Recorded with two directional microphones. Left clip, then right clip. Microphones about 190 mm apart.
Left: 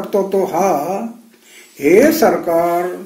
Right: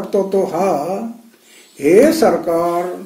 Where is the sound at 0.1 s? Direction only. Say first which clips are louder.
Even; 5° left (ahead or behind).